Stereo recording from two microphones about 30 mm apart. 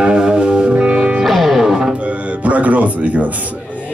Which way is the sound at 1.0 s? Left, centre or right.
Right.